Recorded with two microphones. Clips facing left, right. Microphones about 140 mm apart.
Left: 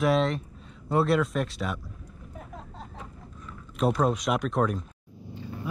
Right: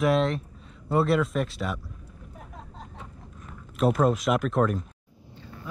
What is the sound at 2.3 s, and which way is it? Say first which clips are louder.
Vehicle: left 2 dB; centre (ahead or behind).